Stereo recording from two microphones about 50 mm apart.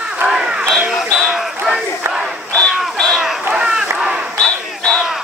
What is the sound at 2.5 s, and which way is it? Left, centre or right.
Crow, centre.